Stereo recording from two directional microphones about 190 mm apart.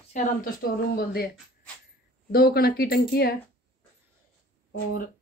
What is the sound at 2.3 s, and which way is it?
Speech, 55° left (ahead or behind).